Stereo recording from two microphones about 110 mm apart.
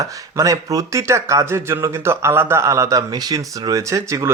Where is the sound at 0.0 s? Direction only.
30° right (ahead or behind).